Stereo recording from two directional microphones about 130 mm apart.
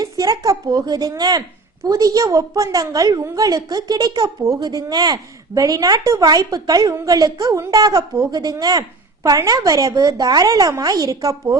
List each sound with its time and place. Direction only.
0.0 s a woman's voice: 30° right (ahead or behind)